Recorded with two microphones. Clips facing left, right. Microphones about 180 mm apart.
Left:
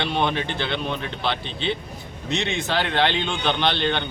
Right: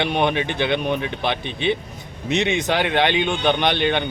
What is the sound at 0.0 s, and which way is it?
Speech, 15° right (ahead or behind).